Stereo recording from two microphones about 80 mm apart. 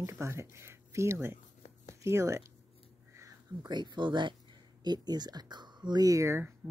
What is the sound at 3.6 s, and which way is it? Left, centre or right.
Speech, right.